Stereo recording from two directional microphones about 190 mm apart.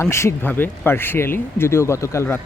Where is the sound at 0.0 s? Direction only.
15° left (ahead or behind).